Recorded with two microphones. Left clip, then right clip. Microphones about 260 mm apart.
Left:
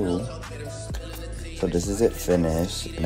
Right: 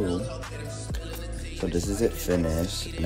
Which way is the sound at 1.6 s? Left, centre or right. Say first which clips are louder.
Left 4 dB; centre.